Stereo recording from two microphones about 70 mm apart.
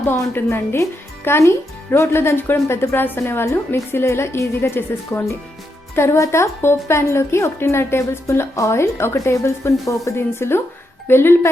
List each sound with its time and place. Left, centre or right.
0.3 s speech: left
6.0 s speech: left